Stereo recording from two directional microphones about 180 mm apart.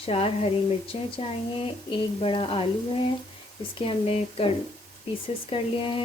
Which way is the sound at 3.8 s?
30° left (ahead or behind).